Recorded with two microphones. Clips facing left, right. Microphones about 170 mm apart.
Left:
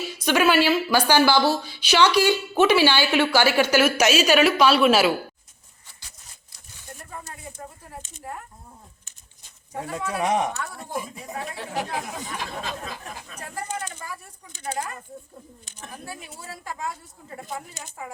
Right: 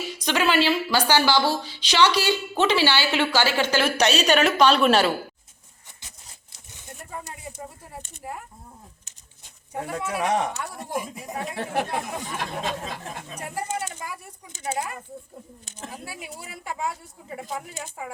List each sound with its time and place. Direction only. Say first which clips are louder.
0.1 s speech: left 3 dB; 10° left (ahead or behind)
6.0 s a sound: right 3 dB; 20° right (ahead or behind)
8.2 s speech: right 1 dB; 10° right (ahead or behind)
9.7 s speech: even; 10° right (ahead or behind)
10.2 s speech: left 1 dB; 15° left (ahead or behind)
10.6 s speech: even; 15° right (ahead or behind)
10.9 s speech: right 2 dB; 5° right (ahead or behind)
11.5 s speech: right 4 dB; 60° right (ahead or behind)
12.5 s speech: right 3 dB; 25° right (ahead or behind)
13.5 s speech: right 2 dB; 10° right (ahead or behind)
16.0 s speech: even; 15° right (ahead or behind)